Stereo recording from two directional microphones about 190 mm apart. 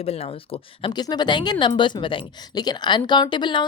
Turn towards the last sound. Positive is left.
turn(degrees=25)  # may be behind; listen again after turning